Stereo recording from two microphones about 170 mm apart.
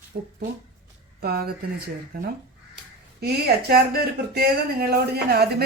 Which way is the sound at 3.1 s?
70° right (ahead or behind).